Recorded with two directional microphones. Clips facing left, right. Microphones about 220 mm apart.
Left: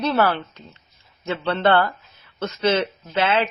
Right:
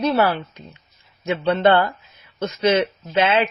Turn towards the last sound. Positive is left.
turn(degrees=-15)  # may be behind; listen again after turning